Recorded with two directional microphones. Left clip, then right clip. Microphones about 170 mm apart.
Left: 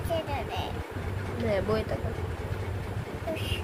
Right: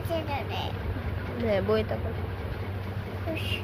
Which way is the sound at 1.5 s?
15° right (ahead or behind).